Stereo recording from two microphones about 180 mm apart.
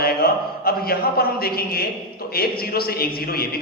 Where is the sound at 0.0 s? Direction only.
55° left (ahead or behind).